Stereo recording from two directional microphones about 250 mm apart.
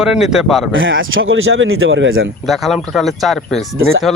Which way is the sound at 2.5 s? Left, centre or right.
Centre.